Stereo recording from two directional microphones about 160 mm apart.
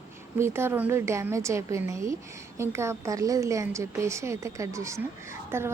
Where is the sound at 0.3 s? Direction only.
15° right (ahead or behind).